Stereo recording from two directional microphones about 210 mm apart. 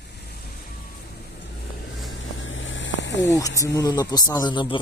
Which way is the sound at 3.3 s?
15° left (ahead or behind).